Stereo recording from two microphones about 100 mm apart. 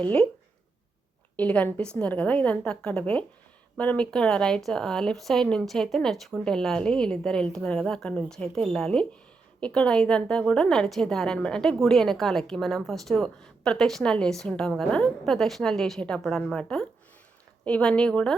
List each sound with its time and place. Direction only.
0.0 s speech: 15° left (ahead or behind)
1.4 s a woman's voice: 15° left (ahead or behind)